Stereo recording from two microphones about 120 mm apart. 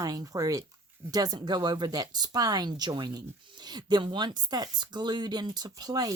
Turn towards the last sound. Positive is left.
turn(degrees=-30)  # may be behind; listen again after turning